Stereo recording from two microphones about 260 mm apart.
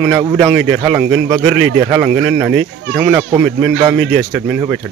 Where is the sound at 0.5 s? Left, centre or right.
Centre.